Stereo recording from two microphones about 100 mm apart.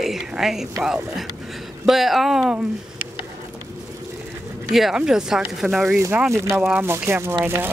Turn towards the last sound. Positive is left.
turn(degrees=-20)  # may be behind; listen again after turning